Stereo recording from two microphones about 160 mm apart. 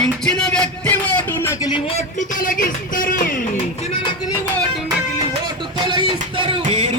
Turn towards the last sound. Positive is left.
turn(degrees=-40)  # may be behind; listen again after turning